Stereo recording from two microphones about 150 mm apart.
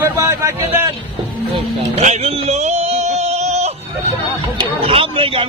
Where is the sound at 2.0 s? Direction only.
50° right (ahead or behind).